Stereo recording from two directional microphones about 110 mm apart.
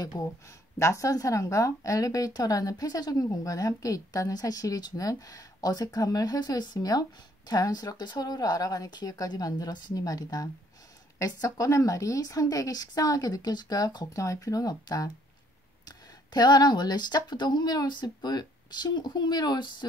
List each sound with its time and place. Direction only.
0.0 s a woman's voice: 35° left (ahead or behind)